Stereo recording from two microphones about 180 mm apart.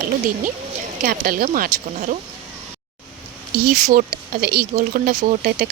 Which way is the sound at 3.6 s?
55° right (ahead or behind).